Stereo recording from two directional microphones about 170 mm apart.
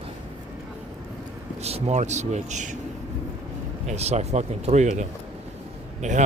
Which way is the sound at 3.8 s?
40° right (ahead or behind).